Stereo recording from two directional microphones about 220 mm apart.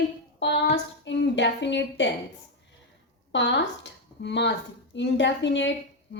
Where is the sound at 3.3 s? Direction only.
55° left (ahead or behind).